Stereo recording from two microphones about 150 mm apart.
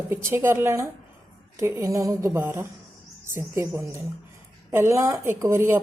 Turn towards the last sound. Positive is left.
turn(degrees=-15)  # may be behind; listen again after turning